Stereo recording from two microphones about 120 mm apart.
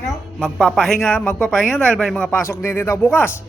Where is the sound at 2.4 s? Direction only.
20° left (ahead or behind).